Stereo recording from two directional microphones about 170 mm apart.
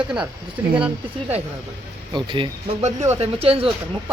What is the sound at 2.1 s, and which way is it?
Speech, 30° right (ahead or behind).